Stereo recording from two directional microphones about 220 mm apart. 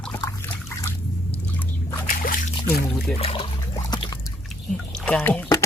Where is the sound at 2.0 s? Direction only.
40° left (ahead or behind).